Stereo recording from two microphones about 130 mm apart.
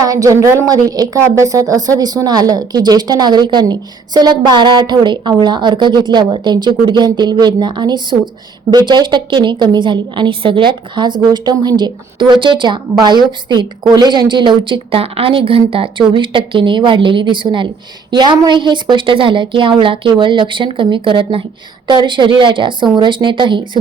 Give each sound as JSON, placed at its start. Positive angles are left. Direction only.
{"t": 0.0, "sound": "speech", "side_deg": -25}